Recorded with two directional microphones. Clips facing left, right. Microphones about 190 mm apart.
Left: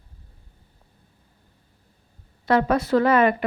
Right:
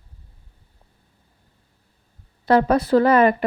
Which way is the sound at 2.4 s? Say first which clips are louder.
Right 3 dB; 35° right (ahead or behind).